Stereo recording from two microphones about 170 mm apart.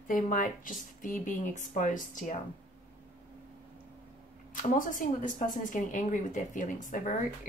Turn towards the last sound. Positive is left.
turn(degrees=50)  # may be behind; listen again after turning